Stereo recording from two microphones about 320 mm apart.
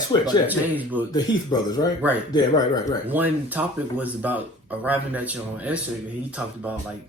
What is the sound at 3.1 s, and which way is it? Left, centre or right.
Speech, centre.